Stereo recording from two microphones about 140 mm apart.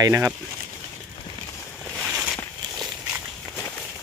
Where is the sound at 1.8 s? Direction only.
5° right (ahead or behind).